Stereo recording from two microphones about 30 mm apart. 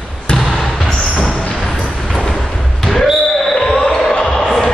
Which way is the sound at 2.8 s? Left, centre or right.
Centre.